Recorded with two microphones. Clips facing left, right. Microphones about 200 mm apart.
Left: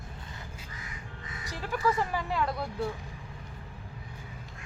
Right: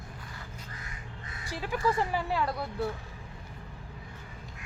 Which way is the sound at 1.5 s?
15° right (ahead or behind).